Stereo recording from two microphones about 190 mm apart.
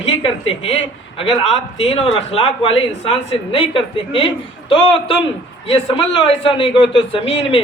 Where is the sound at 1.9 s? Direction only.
30° left (ahead or behind).